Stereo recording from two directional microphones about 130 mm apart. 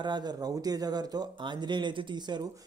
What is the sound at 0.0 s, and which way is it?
Speech, 35° right (ahead or behind).